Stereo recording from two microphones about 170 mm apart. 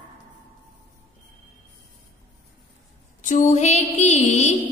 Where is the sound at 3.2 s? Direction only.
45° left (ahead or behind).